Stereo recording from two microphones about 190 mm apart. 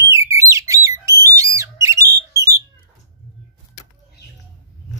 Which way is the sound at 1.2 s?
15° right (ahead or behind).